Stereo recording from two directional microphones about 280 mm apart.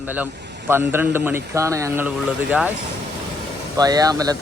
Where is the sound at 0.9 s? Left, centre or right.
Centre.